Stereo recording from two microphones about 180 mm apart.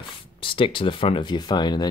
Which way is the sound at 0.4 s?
30° left (ahead or behind).